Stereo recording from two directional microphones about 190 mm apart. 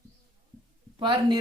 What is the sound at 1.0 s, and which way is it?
Speech, 25° right (ahead or behind).